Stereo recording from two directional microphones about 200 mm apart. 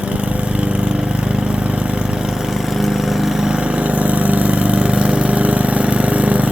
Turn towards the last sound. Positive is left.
turn(degrees=-5)  # may be behind; listen again after turning